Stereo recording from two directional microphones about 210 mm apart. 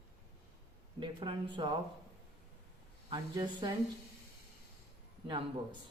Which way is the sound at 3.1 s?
20° right (ahead or behind).